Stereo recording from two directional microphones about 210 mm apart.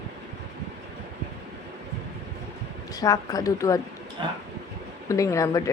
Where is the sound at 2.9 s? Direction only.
15° left (ahead or behind).